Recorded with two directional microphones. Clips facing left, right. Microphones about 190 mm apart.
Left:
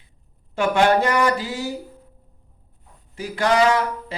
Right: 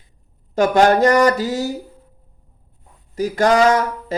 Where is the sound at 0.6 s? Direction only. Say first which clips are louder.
Right 4 dB; 40° right (ahead or behind).